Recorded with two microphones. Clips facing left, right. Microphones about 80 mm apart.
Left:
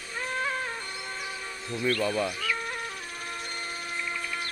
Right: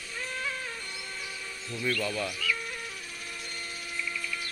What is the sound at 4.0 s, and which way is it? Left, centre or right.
Music, left.